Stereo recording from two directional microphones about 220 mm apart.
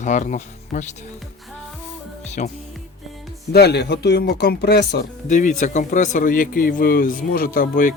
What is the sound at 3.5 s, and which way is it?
Speech, 50° left (ahead or behind).